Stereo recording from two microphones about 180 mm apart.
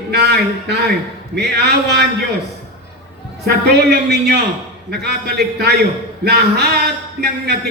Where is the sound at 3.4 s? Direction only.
65° right (ahead or behind).